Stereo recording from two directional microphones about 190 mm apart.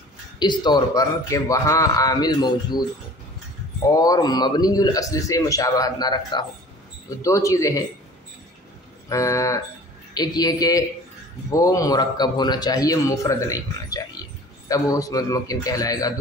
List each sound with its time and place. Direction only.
0.4 s a man's voice: 25° left (ahead or behind)
9.1 s a man's voice: 15° left (ahead or behind)